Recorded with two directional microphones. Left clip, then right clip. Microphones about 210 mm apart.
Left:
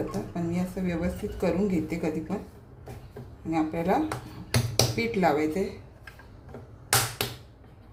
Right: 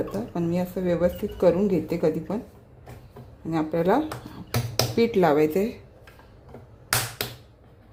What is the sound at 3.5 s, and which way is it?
Speech, 40° right (ahead or behind).